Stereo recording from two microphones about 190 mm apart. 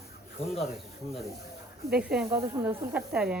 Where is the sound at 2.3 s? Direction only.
15° right (ahead or behind).